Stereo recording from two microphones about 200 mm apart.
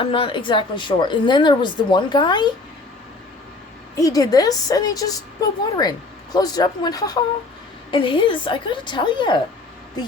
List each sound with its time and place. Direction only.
0.0 s a woman's voice: 25° left (ahead or behind)
3.9 s a woman's voice: 15° left (ahead or behind)